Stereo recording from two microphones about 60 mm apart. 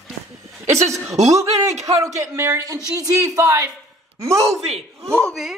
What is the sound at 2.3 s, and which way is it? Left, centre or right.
Speech, right.